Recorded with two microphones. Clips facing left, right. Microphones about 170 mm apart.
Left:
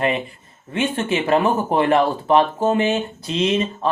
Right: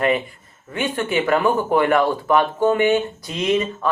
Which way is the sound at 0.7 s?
25° left (ahead or behind).